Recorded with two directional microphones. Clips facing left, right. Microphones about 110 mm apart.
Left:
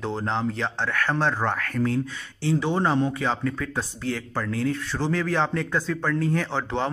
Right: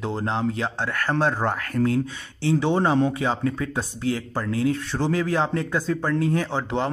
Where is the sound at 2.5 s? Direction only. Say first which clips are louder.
Right 2 dB; 25° right (ahead or behind).